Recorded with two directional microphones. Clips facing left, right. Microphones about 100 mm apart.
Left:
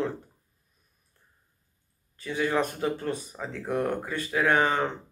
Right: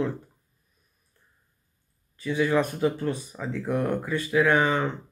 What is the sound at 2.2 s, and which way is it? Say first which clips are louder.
Speech: right 3 dB; 35° left (ahead or behind).